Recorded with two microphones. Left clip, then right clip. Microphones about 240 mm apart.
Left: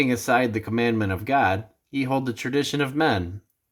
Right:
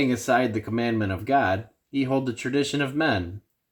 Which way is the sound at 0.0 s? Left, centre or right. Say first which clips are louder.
Left 1 dB; left.